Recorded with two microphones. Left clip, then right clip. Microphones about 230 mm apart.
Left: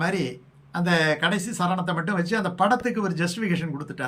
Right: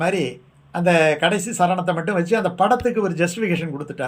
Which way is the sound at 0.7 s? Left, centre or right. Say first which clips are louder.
Right 6 dB; centre.